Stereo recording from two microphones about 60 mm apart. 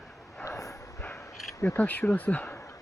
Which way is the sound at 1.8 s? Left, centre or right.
Left.